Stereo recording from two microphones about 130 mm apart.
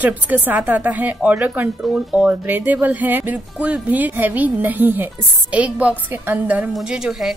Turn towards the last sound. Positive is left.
turn(degrees=-5)  # may be behind; listen again after turning